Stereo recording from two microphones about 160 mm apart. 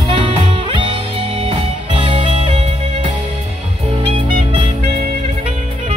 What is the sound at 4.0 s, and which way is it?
Music, 30° right (ahead or behind).